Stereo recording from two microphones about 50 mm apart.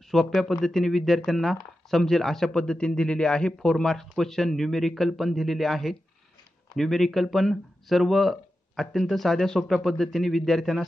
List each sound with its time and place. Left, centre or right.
0.1 s speech: centre
2.5 s speech: centre